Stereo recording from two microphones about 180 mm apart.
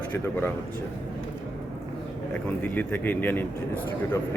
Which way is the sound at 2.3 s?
10° left (ahead or behind).